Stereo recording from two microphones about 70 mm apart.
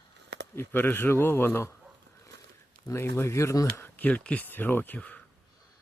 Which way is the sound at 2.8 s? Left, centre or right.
Left.